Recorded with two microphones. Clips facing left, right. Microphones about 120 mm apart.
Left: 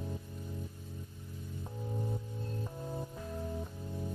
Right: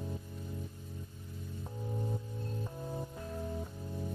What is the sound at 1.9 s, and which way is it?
Music, centre (ahead or behind).